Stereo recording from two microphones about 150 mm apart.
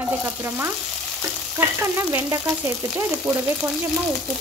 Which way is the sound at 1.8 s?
20° right (ahead or behind).